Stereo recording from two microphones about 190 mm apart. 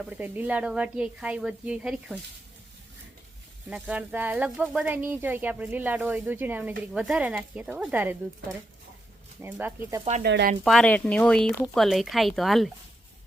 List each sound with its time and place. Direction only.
0.0 s speech: 5° right (ahead or behind)
3.7 s speech: 5° right (ahead or behind)
9.4 s speech: 10° right (ahead or behind)
10.0 s speech: 35° right (ahead or behind)
10.2 s speech: 60° right (ahead or behind)
10.6 s speech: centre (ahead or behind)